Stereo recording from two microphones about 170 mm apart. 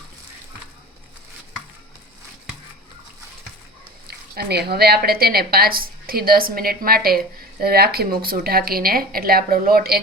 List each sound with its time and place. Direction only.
4.1 s a woman's voice: 70° right (ahead or behind)